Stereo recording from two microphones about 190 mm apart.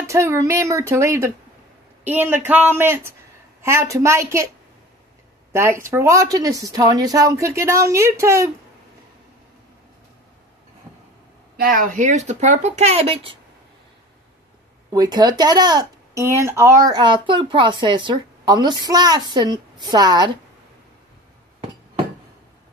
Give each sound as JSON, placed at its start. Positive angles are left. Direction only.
{"t": 0.0, "sound": "speech", "side_deg": -15}
{"t": 5.5, "sound": "speech", "side_deg": -15}
{"t": 11.5, "sound": "speech", "side_deg": -50}
{"t": 14.9, "sound": "speech", "side_deg": -20}